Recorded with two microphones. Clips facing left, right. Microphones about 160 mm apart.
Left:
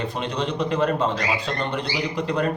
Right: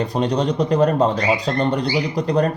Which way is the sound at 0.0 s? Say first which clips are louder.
Right 7 dB; 40° right (ahead or behind).